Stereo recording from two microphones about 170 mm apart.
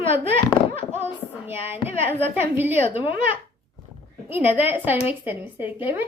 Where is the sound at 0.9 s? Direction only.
10° right (ahead or behind).